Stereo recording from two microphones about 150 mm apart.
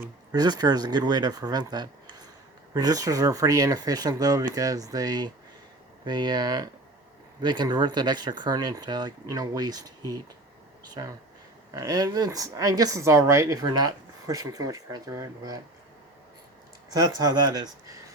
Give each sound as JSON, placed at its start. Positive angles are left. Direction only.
{"t": 0.3, "sound": "speech", "side_deg": -25}
{"t": 16.9, "sound": "speech", "side_deg": -25}